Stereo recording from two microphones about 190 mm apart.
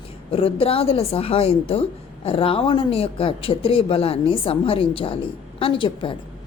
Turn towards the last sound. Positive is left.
turn(degrees=25)  # may be behind; listen again after turning